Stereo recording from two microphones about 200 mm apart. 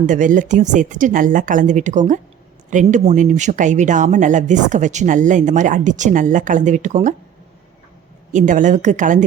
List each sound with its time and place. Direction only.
0.0 s speech: 40° right (ahead or behind)
8.3 s speech: 40° right (ahead or behind)